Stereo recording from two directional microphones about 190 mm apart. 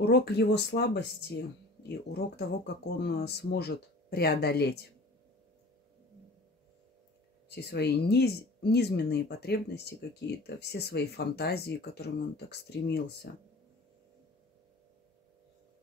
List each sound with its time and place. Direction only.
0.0 s speech: 60° left (ahead or behind)
7.4 s speech: 60° left (ahead or behind)